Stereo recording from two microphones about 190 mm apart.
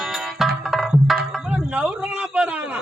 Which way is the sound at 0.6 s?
Centre (ahead or behind).